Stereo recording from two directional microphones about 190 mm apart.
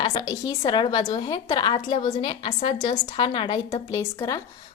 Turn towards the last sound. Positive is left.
turn(degrees=20)  # may be behind; listen again after turning